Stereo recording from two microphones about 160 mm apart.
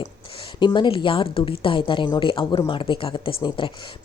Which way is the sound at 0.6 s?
30° left (ahead or behind).